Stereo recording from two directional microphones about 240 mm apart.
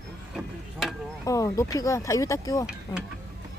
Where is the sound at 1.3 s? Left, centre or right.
Centre.